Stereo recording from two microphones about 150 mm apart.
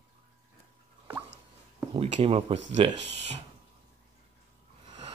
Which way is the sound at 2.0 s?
40° right (ahead or behind).